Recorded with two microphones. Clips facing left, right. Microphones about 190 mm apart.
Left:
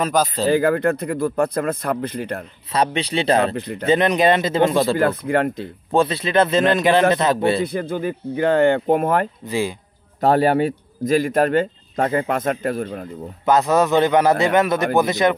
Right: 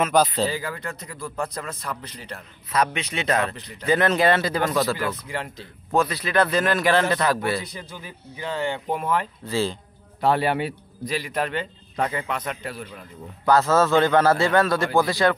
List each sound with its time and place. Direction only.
0.5 s speech: 55° left (ahead or behind)
2.7 s speech: 30° left (ahead or behind)
3.5 s speech: 55° left (ahead or behind)
3.8 s a man's voice: 20° left (ahead or behind)
4.9 s speech: 55° left (ahead or behind)
5.9 s a man's voice: 30° left (ahead or behind)
7.6 s speech: 55° left (ahead or behind)
9.5 s speech: 15° left (ahead or behind)
10.2 s a man's voice: 45° left (ahead or behind)
13.5 s a man's voice: 20° left (ahead or behind)